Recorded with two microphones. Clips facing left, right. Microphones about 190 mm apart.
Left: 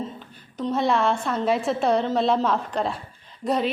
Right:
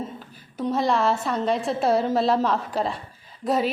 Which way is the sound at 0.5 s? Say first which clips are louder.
Even; 5° right (ahead or behind).